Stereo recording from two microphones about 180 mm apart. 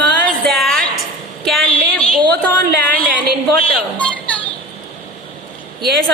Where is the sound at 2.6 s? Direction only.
65° right (ahead or behind).